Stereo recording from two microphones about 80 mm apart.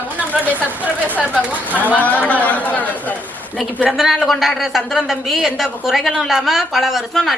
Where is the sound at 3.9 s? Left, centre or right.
Centre.